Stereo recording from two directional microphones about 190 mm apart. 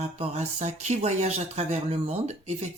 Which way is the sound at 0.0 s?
35° right (ahead or behind).